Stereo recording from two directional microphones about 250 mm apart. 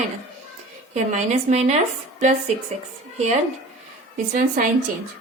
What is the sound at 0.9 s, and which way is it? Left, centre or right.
Speech, right.